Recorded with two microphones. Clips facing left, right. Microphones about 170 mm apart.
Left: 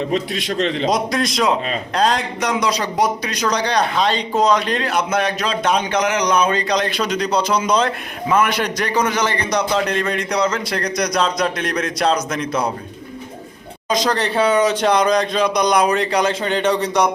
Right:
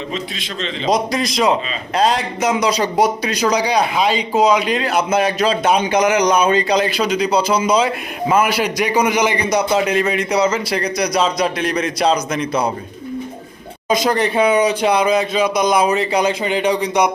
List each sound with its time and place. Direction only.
0.1 s a man's voice: 60° left (ahead or behind)
0.9 s a man's voice: centre (ahead or behind)
13.9 s speech: 10° right (ahead or behind)